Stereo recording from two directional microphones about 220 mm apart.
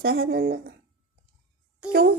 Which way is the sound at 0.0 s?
45° right (ahead or behind).